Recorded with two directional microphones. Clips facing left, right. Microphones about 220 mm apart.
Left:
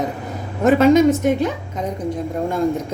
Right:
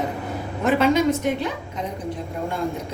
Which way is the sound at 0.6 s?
45° left (ahead or behind).